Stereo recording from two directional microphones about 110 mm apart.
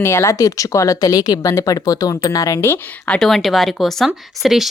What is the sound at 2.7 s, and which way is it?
Speech, 10° left (ahead or behind).